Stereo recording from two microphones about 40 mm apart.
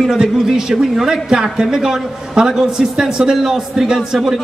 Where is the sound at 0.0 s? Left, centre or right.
Centre.